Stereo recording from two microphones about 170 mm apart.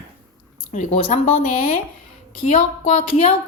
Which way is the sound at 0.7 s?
40° left (ahead or behind).